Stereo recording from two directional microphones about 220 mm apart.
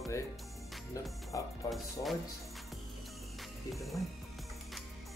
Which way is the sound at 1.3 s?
15° left (ahead or behind).